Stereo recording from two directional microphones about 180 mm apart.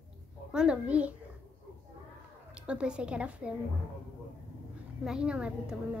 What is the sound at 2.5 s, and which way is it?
A woman's voice, 5° right (ahead or behind).